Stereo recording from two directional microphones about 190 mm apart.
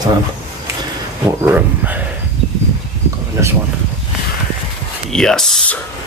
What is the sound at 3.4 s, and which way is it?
Speech, 15° right (ahead or behind).